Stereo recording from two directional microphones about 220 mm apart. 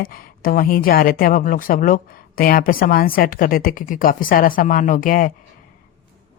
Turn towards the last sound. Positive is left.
turn(degrees=40)  # may be behind; listen again after turning